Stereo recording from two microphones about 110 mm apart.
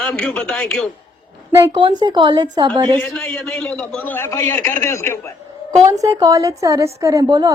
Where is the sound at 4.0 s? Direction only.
20° left (ahead or behind).